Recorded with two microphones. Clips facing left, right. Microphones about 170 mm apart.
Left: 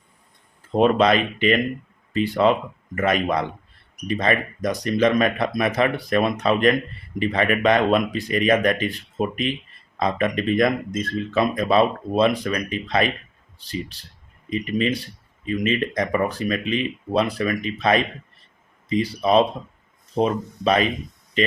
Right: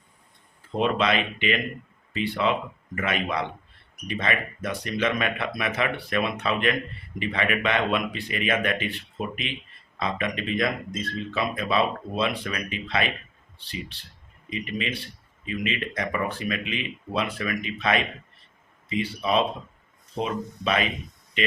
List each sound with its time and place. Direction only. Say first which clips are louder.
0.8 s speech: left 7 dB; 40° left (ahead or behind)